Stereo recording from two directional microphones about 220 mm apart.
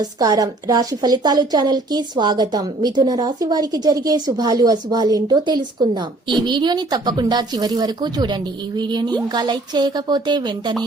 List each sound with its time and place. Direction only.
0.0 s a woman's voice: 15° right (ahead or behind)